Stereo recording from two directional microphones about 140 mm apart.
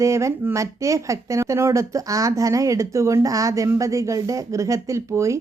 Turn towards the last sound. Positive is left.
turn(degrees=-20)  # may be behind; listen again after turning